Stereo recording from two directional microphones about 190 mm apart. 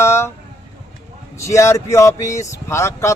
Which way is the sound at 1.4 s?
15° left (ahead or behind).